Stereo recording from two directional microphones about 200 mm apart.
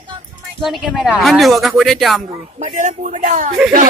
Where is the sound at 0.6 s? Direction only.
Centre (ahead or behind).